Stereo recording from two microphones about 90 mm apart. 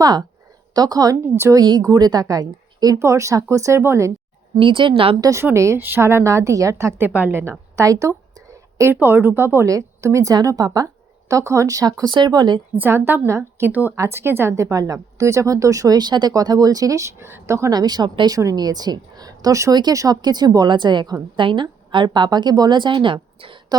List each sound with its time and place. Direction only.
0.0 s a woman's voice: 50° right (ahead or behind)
1.1 s a woman's voice: 30° right (ahead or behind)
1.5 s a woman's voice: 55° right (ahead or behind); by 4.1 s 30° right (ahead or behind)
4.6 s speech: 65° right (ahead or behind)
5.2 s a woman's voice: 35° right (ahead or behind)
7.1 s a woman's voice: 20° right (ahead or behind)
7.8 s a sound: 35° right (ahead or behind)
8.9 s a woman's voice: 25° right (ahead or behind)
9.6 s a woman's voice: 35° right (ahead or behind); by 12.5 s 50° right (ahead or behind)
12.8 s a woman's voice: 20° right (ahead or behind)
17.7 s a woman's voice: 50° right (ahead or behind)
20.7 s a woman's voice: 60° right (ahead or behind)